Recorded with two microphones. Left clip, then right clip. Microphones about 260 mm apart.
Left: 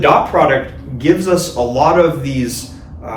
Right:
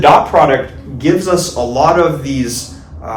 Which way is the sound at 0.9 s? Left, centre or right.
Centre.